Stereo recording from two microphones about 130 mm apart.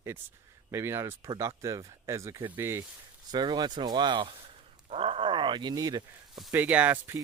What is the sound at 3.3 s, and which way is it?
Speech, 35° right (ahead or behind).